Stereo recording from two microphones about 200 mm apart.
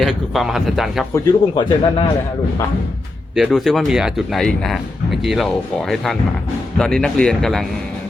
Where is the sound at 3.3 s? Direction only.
Centre (ahead or behind).